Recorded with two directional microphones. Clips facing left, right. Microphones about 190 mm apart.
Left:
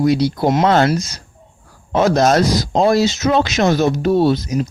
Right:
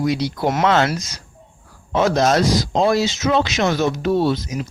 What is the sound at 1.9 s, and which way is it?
Speech, 45° left (ahead or behind).